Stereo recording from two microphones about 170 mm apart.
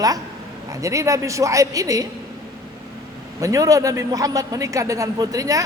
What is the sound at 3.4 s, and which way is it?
A man's voice, 20° right (ahead or behind).